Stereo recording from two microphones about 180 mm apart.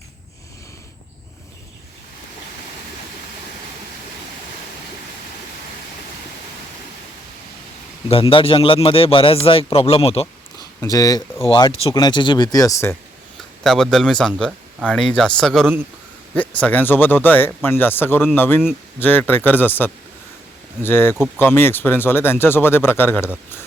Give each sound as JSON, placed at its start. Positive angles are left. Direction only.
{"t": 8.0, "sound": "a man's voice", "side_deg": 30}
{"t": 10.6, "sound": "speech", "side_deg": 20}
{"t": 13.7, "sound": "speech", "side_deg": 5}